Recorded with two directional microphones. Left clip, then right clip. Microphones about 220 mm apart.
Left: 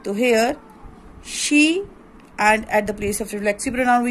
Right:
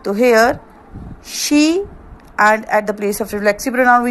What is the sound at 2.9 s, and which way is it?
Speech, 35° right (ahead or behind).